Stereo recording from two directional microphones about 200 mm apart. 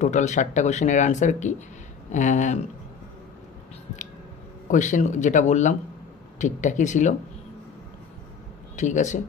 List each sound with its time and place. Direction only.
0.0 s speech: 35° left (ahead or behind)
4.6 s speech: 40° left (ahead or behind)
8.7 s speech: 35° left (ahead or behind)